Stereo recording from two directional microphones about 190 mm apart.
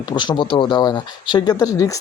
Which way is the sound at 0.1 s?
25° left (ahead or behind).